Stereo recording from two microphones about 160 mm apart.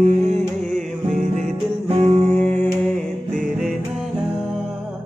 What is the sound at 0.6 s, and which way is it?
Music, 5° left (ahead or behind).